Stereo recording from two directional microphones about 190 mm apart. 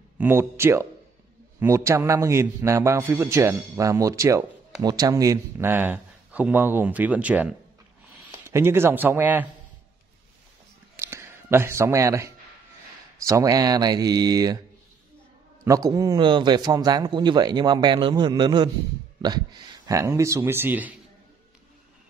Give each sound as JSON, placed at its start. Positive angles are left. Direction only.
{"t": 0.2, "sound": "a man's voice", "side_deg": -10}
{"t": 8.5, "sound": "a man's voice", "side_deg": -15}
{"t": 11.0, "sound": "a sound", "side_deg": -15}
{"t": 13.2, "sound": "speech", "side_deg": -15}
{"t": 15.6, "sound": "a man's voice", "side_deg": -15}